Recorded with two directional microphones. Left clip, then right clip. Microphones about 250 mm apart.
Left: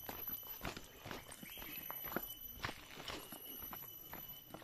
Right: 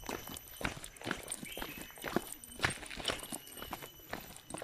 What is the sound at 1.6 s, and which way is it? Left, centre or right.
Walk, right.